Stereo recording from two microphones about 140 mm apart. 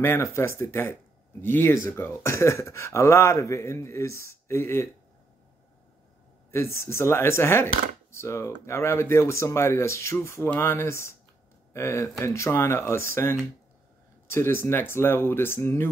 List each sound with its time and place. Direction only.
0.0 s speech: 20° left (ahead or behind)
6.5 s speech: 20° left (ahead or behind)